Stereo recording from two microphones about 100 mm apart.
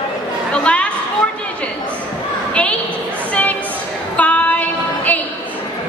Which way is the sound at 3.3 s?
15° left (ahead or behind).